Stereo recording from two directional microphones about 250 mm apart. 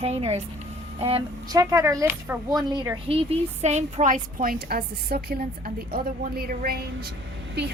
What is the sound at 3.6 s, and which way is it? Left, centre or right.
A woman's voice, right.